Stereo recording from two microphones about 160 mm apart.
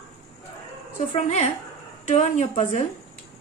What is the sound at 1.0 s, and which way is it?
A woman's voice, 45° left (ahead or behind).